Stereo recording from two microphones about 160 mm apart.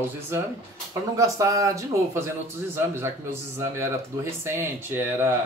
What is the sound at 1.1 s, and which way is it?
A man's voice, 20° right (ahead or behind).